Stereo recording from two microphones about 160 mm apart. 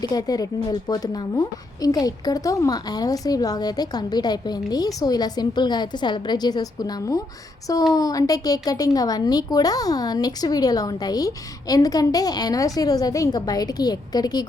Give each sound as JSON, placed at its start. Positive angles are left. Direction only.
{"t": 0.1, "sound": "a woman's voice", "side_deg": 25}